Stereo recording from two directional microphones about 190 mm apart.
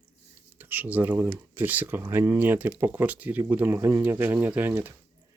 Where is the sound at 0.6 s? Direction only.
10° right (ahead or behind).